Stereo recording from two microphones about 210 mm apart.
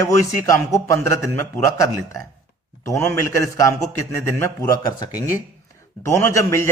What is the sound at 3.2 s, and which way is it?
A man's voice, 15° left (ahead or behind).